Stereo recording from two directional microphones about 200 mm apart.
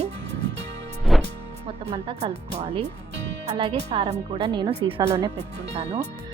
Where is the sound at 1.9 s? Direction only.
30° right (ahead or behind).